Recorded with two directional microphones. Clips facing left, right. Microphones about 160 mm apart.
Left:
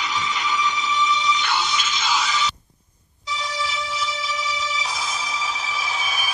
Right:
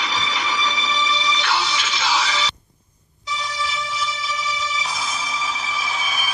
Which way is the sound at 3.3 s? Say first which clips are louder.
Even; 30° left (ahead or behind).